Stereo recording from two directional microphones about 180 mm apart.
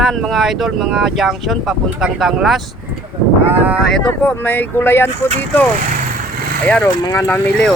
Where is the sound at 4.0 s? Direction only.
10° left (ahead or behind).